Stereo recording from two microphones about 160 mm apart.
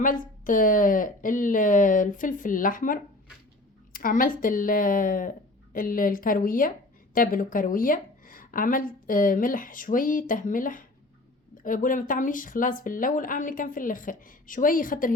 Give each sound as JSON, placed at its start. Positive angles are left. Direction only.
{"t": 0.0, "sound": "speech", "side_deg": 55}